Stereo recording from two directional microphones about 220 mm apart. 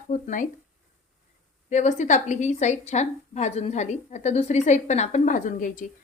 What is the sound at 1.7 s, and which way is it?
A woman's voice, 30° left (ahead or behind).